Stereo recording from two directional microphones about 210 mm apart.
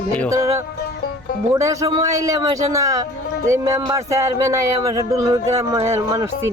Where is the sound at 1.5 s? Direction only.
15° right (ahead or behind).